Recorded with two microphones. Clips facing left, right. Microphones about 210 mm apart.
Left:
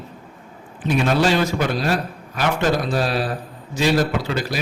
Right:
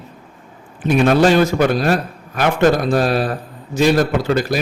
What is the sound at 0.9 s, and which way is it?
A man's voice, 50° right (ahead or behind).